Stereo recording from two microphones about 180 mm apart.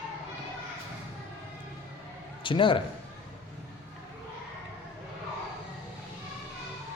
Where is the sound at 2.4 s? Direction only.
25° left (ahead or behind).